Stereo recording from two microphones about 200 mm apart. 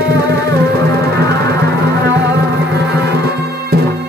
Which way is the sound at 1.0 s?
55° right (ahead or behind).